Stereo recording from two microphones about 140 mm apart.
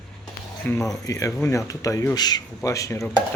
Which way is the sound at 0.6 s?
15° left (ahead or behind).